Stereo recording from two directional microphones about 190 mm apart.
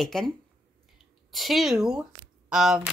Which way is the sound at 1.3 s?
Centre (ahead or behind).